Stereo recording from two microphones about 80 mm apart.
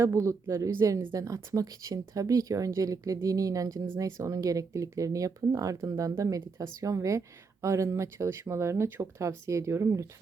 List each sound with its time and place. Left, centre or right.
0.0 s speech: right